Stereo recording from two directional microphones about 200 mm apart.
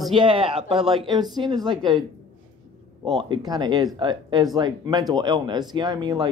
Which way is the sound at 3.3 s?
20° right (ahead or behind).